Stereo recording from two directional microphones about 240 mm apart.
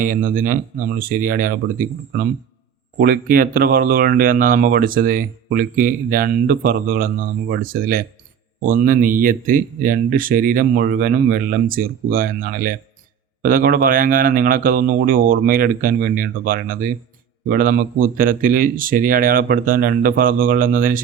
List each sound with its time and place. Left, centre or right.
0.0 s speech: right